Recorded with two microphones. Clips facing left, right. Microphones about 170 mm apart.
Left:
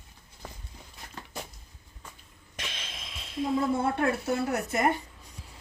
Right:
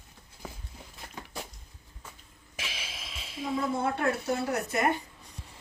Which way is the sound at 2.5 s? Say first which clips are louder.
Even; 5° right (ahead or behind).